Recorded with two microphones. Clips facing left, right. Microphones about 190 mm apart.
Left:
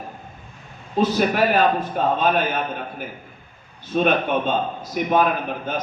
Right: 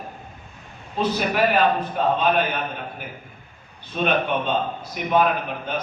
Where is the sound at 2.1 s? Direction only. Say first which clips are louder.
Left 1 dB; 45° left (ahead or behind).